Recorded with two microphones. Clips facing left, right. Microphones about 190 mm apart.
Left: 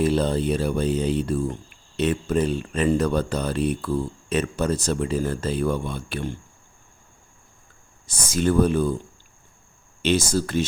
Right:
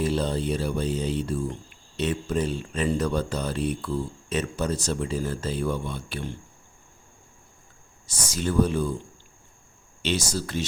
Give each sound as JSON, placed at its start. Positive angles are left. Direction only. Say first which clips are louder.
{"t": 0.0, "sound": "speech", "louder": "left 4 dB", "side_deg": 55}
{"t": 8.0, "sound": "speech", "louder": "left 6 dB", "side_deg": 50}
{"t": 10.0, "sound": "speech", "louder": "left 6 dB", "side_deg": 50}